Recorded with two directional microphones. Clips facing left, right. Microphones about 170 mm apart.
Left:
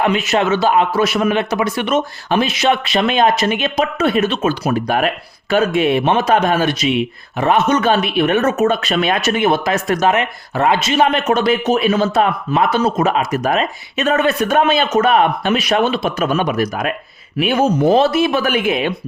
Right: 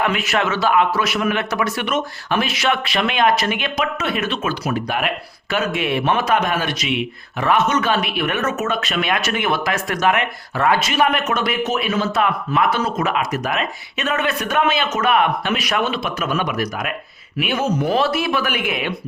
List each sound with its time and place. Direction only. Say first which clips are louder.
0.0 s speech: left 4 dB; 25° left (ahead or behind)
1.5 s speech: left 4 dB; 20° left (ahead or behind)
4.7 s speech: left 5 dB; 40° left (ahead or behind)